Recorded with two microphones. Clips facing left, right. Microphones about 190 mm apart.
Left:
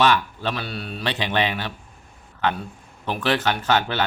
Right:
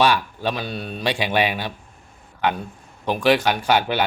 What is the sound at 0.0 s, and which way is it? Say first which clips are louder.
Speech: right 1 dB; 10° right (ahead or behind).